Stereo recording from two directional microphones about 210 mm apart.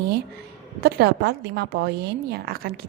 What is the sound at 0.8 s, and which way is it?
A woman's voice, 50° right (ahead or behind).